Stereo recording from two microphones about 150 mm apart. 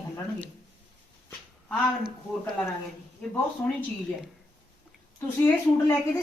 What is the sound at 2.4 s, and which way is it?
Speech, 15° left (ahead or behind).